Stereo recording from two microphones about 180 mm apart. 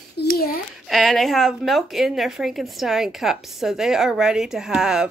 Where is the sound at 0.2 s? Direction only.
55° left (ahead or behind).